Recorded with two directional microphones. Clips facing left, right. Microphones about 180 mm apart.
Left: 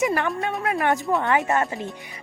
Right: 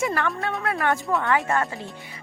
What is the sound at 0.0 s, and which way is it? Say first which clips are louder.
A woman's voice: left 2 dB; 15° left (ahead or behind).